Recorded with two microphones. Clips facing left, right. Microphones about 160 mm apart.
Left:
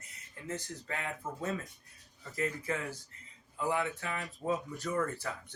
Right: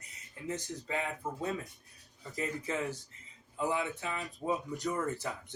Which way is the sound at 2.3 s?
20° right (ahead or behind).